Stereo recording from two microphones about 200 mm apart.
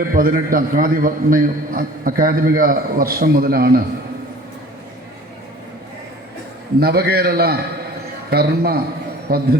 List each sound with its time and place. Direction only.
0.0 s a man's voice: 45° right (ahead or behind)
6.7 s a man's voice: 55° right (ahead or behind)